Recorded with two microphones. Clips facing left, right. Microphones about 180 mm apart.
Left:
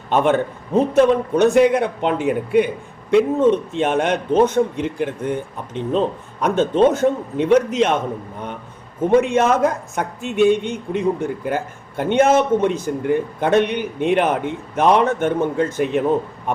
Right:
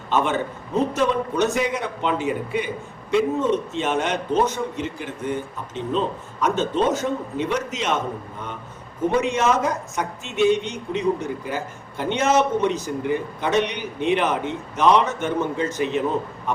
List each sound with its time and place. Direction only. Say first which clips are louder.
0.1 s a man's voice: left 5 dB; 55° left (ahead or behind)
9.2 s a man's voice: left 4 dB; 55° left (ahead or behind)